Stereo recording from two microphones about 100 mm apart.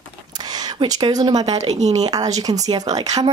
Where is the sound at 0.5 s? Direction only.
40° right (ahead or behind).